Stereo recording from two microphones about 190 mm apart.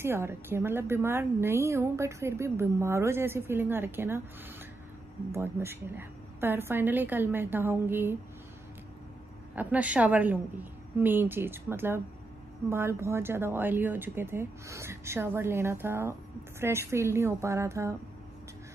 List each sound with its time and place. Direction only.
0.0 s speech: 10° right (ahead or behind)
5.3 s speech: 15° right (ahead or behind)
9.6 s speech: 10° right (ahead or behind)